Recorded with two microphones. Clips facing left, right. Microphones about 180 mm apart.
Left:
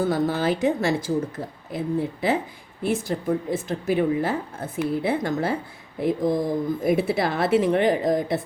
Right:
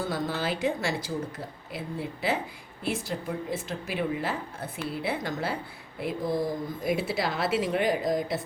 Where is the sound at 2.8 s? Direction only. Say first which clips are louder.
Left 7 dB; 45° left (ahead or behind).